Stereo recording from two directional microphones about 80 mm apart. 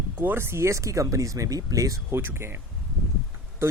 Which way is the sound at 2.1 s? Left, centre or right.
Right.